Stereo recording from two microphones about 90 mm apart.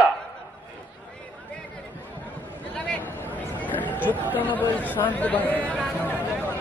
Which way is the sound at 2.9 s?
20° left (ahead or behind).